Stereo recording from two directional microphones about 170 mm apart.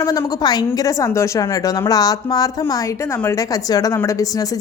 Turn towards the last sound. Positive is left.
turn(degrees=20)  # may be behind; listen again after turning